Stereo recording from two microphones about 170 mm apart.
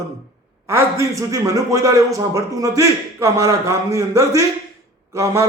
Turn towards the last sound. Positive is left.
turn(degrees=-15)  # may be behind; listen again after turning